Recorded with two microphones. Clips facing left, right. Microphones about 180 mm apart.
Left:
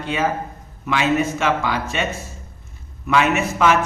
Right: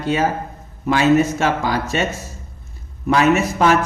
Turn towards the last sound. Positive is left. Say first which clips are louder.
# right 3 dB
turn(degrees=-40)  # may be behind; listen again after turning